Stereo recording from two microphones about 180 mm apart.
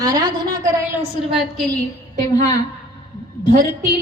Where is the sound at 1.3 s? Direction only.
5° left (ahead or behind).